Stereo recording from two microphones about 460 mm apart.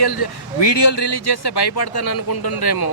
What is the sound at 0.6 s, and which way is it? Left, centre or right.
Speech, left.